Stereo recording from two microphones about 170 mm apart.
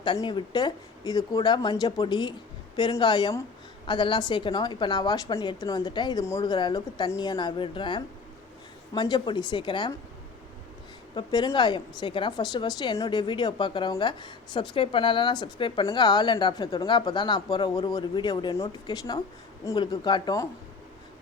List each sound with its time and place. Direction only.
0.0 s speech: 25° left (ahead or behind)
11.1 s speech: 25° left (ahead or behind)